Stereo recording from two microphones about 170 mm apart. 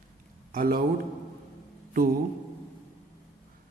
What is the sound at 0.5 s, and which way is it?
Speech, 60° right (ahead or behind).